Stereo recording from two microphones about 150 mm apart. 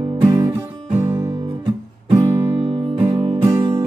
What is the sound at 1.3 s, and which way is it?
Guitar, 35° right (ahead or behind).